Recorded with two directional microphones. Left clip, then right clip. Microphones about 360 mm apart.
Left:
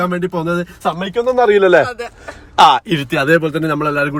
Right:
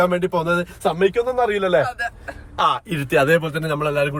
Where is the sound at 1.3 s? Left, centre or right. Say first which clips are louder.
Left 8 dB; left.